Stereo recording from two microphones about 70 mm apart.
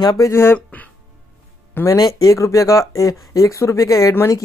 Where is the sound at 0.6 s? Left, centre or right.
Left.